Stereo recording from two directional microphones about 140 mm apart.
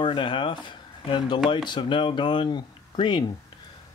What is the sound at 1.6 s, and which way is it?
Speech, 35° left (ahead or behind).